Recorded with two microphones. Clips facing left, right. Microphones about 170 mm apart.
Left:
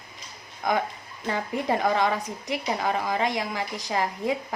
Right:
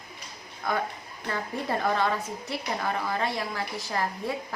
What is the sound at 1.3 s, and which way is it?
A woman's voice, 15° left (ahead or behind).